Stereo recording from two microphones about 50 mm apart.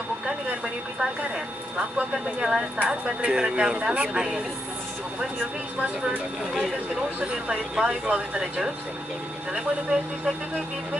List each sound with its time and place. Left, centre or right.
1.8 s a woman's voice: centre
7.2 s a woman's voice: right